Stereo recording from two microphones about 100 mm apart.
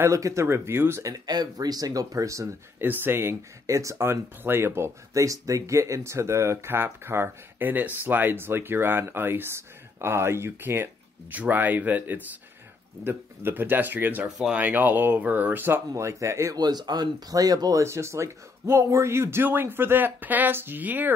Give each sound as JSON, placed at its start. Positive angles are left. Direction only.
{"t": 0.0, "sound": "speech", "side_deg": -30}
{"t": 16.5, "sound": "speech", "side_deg": -45}